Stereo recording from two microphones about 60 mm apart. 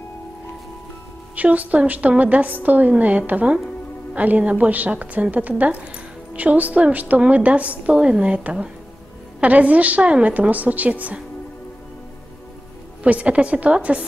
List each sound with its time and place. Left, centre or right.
1.3 s a woman's voice: right
13.0 s a woman's voice: right